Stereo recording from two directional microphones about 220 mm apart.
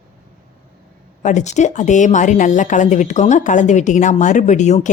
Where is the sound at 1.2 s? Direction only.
30° left (ahead or behind).